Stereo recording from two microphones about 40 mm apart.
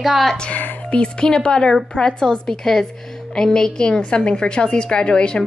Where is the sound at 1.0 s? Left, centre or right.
Left.